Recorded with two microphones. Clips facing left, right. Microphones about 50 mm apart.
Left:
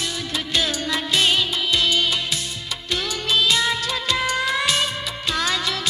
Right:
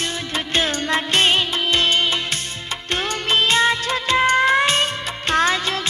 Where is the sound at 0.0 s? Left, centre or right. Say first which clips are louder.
Right 2 dB; right.